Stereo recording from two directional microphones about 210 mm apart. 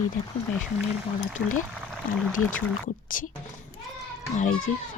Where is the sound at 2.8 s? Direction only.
40° left (ahead or behind).